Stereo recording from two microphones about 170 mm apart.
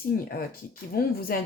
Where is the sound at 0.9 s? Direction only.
65° left (ahead or behind).